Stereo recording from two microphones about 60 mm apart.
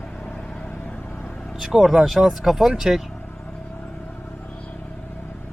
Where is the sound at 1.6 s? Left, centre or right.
Centre.